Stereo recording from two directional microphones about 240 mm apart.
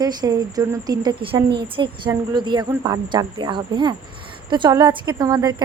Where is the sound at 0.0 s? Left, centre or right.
Centre.